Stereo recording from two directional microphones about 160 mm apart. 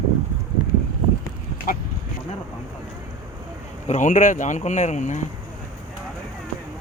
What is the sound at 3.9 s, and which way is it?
Speech, 50° left (ahead or behind).